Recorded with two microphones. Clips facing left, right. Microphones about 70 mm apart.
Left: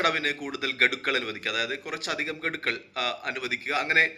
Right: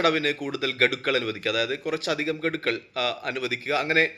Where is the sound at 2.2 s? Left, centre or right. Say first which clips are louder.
Right 4 dB; left.